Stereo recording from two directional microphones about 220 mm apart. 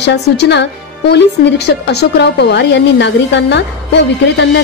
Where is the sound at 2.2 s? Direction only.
50° left (ahead or behind).